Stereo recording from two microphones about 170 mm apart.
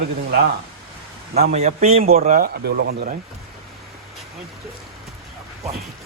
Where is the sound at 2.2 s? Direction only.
55° right (ahead or behind); by 3.0 s 70° right (ahead or behind).